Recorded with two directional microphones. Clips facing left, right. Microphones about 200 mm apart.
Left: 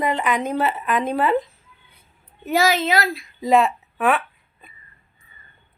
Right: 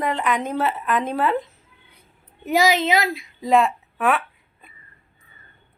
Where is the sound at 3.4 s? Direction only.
Centre (ahead or behind).